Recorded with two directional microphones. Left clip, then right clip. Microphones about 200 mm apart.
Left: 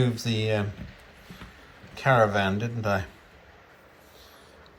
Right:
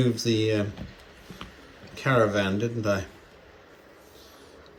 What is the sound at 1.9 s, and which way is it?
Speech, 15° right (ahead or behind).